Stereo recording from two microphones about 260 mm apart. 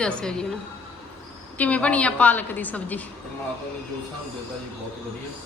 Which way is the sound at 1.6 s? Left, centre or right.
Centre.